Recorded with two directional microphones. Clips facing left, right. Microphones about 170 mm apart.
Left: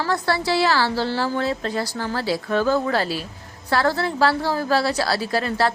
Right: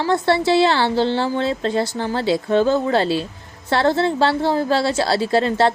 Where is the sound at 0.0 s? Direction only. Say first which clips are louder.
Right 5 dB; 20° right (ahead or behind).